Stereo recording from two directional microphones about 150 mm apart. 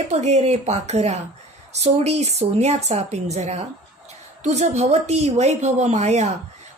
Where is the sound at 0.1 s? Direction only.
50° right (ahead or behind).